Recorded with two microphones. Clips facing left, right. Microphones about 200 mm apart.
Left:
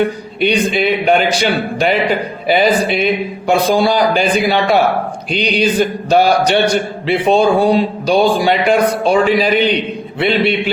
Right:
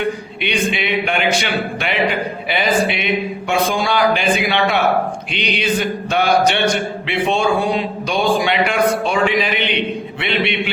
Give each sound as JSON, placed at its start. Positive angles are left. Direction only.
{"t": 0.4, "sound": "a man's voice", "side_deg": 40}